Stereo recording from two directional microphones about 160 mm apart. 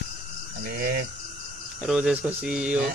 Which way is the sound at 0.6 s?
75° right (ahead or behind).